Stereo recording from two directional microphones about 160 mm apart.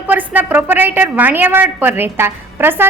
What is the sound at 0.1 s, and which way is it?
A woman's voice, 10° right (ahead or behind).